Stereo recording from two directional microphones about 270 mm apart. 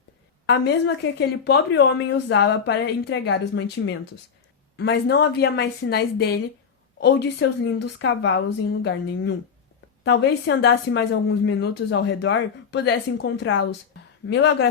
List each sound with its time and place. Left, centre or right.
0.4 s speech: left